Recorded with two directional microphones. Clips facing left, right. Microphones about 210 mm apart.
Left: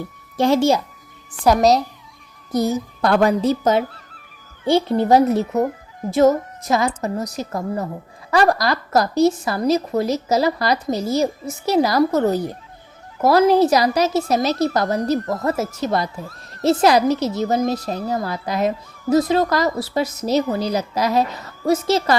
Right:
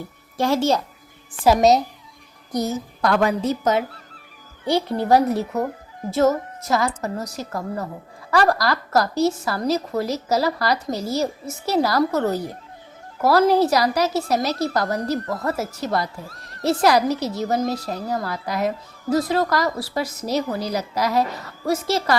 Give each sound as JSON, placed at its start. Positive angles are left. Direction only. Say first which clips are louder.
{"t": 0.3, "sound": "a woman's voice", "louder": "left 4 dB", "side_deg": 20}
{"t": 2.5, "sound": "a woman's voice", "louder": "left 4 dB", "side_deg": 10}
{"t": 3.0, "sound": "a woman's voice", "louder": "left 3 dB", "side_deg": 35}